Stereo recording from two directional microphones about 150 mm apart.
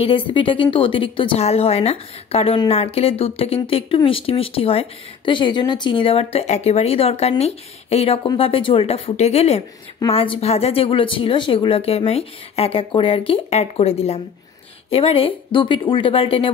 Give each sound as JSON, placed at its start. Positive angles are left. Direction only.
{"t": 0.0, "sound": "speech", "side_deg": 35}